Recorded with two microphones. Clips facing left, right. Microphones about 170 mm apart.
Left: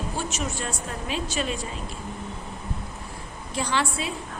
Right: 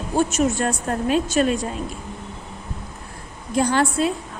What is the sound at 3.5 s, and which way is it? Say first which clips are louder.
Speech: right 8 dB; 45° right (ahead or behind).